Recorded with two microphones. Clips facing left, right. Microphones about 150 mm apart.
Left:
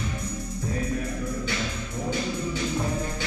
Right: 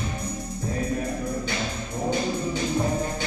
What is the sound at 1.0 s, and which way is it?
Music, 35° right (ahead or behind).